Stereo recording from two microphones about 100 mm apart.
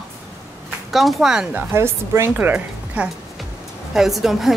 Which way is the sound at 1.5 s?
25° right (ahead or behind).